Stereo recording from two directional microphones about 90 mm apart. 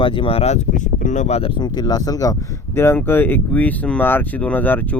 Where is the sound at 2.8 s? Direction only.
25° left (ahead or behind).